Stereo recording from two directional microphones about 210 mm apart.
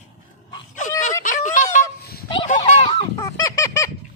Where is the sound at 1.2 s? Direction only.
40° left (ahead or behind).